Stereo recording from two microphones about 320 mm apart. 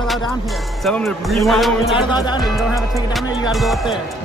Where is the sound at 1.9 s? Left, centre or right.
Centre.